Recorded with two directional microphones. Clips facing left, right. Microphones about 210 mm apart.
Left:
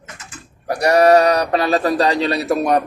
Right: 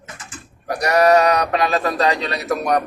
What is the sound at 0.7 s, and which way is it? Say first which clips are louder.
Speech: left 3 dB; 30° left (ahead or behind).